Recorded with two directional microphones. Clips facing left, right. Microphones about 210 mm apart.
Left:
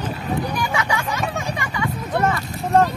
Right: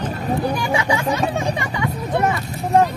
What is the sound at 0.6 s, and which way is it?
Vehicle, 30° right (ahead or behind).